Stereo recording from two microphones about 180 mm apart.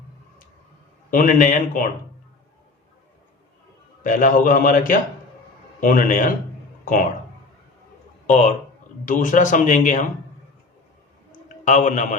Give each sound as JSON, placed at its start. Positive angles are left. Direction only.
{"t": 1.1, "sound": "speech", "side_deg": 50}
{"t": 4.0, "sound": "speech", "side_deg": 45}
{"t": 8.3, "sound": "speech", "side_deg": 40}
{"t": 11.6, "sound": "a man's voice", "side_deg": 45}